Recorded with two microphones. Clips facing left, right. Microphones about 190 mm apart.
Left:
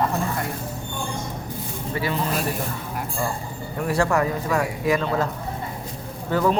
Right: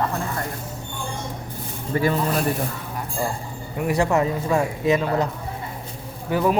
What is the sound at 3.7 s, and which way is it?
Speech, 15° right (ahead or behind).